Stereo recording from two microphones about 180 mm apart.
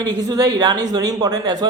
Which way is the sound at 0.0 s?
20° right (ahead or behind).